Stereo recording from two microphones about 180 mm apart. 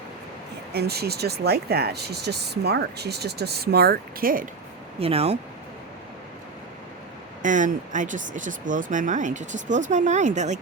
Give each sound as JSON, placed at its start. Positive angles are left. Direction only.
{"t": 0.7, "sound": "speech", "side_deg": -65}
{"t": 4.9, "sound": "speech", "side_deg": -35}
{"t": 7.4, "sound": "speech", "side_deg": -45}